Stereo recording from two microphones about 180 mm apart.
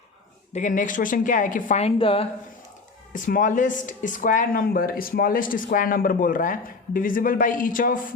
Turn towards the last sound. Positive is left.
turn(degrees=50)  # may be behind; listen again after turning